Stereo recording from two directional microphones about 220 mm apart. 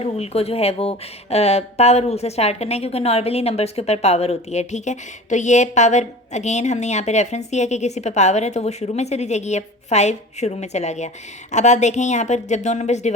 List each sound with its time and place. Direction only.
0.0 s speech: 25° left (ahead or behind)